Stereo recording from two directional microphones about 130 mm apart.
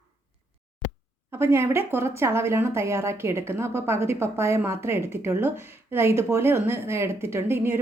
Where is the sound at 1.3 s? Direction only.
20° right (ahead or behind).